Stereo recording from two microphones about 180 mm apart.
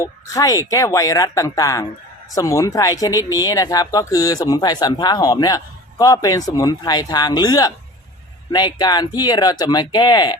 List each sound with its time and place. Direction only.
0.0 s speech: 20° left (ahead or behind)